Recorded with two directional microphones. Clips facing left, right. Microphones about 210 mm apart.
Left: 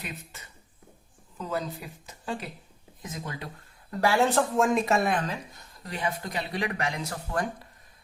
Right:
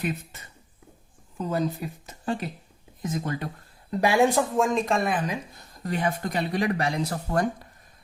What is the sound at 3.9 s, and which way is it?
Speech, 15° right (ahead or behind).